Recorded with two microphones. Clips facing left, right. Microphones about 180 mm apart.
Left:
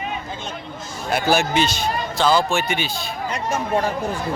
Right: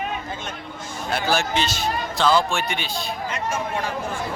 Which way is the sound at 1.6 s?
Centre (ahead or behind).